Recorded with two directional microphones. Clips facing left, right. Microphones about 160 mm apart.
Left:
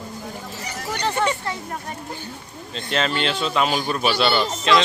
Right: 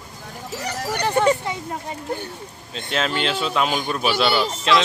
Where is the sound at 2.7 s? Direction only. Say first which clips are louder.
Left 1 dB; 5° right (ahead or behind).